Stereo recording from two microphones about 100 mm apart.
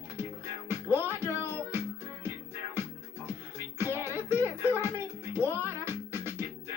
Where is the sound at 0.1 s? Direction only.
25° right (ahead or behind).